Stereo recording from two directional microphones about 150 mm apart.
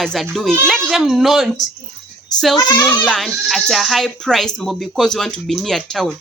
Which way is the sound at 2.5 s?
25° left (ahead or behind).